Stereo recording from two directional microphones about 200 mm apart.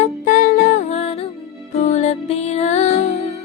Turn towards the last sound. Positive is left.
turn(degrees=35)  # may be behind; listen again after turning